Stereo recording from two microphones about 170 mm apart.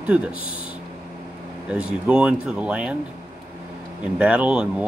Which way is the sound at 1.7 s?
5° right (ahead or behind).